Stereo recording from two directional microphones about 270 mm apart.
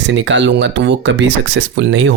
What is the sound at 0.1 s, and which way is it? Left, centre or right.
Speech, right.